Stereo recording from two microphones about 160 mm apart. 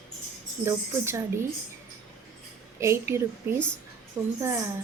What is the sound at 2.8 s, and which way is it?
Speech, 15° right (ahead or behind).